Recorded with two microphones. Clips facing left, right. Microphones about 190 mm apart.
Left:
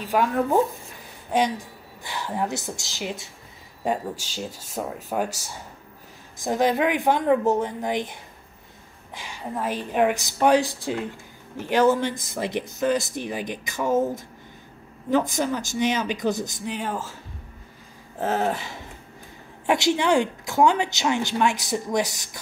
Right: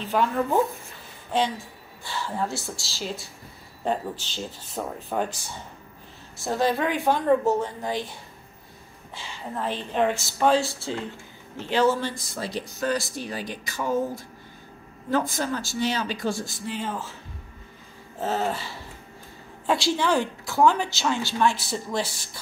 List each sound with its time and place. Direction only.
0.0 s speech: 10° left (ahead or behind)
2.0 s speech: 15° left (ahead or behind)
6.3 s speech: 15° left (ahead or behind)
18.3 s speech: 15° left (ahead or behind)